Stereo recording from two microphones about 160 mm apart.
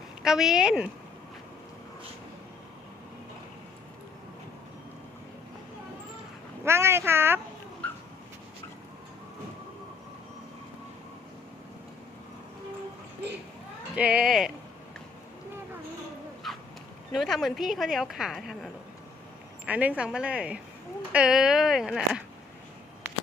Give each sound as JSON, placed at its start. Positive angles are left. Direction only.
{"t": 0.2, "sound": "a woman's voice", "side_deg": -5}
{"t": 6.7, "sound": "a woman's voice", "side_deg": -15}
{"t": 7.8, "sound": "dog", "side_deg": 10}
{"t": 13.9, "sound": "a sound", "side_deg": -10}
{"t": 16.4, "sound": "a sound", "side_deg": 0}
{"t": 17.1, "sound": "a woman's voice", "side_deg": 0}